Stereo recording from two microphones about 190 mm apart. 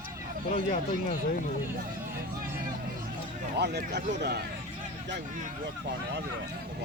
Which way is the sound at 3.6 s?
60° right (ahead or behind).